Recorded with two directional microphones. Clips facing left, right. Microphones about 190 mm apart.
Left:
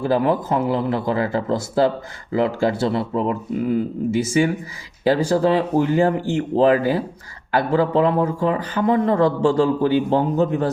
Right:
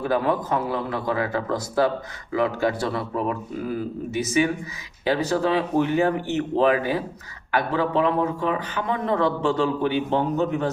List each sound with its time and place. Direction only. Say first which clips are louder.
0.0 s speech: left 4 dB; 30° left (ahead or behind)